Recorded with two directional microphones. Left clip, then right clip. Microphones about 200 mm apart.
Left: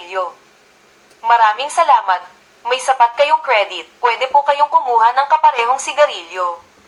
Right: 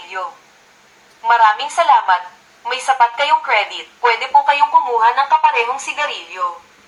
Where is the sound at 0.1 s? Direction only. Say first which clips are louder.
Left 5 dB; 50° left (ahead or behind).